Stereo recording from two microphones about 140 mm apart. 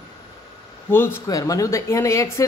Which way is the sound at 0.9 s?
15° left (ahead or behind).